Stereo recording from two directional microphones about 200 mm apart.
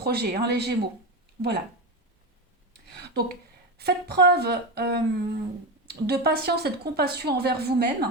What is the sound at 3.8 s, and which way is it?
Speech, 50° right (ahead or behind).